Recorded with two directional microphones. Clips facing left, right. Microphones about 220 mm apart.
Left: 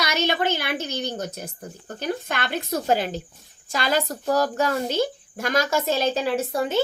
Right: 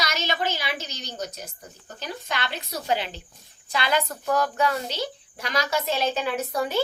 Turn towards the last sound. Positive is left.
turn(degrees=25)  # may be behind; listen again after turning